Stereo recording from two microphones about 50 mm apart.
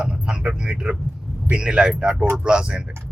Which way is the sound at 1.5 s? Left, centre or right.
Right.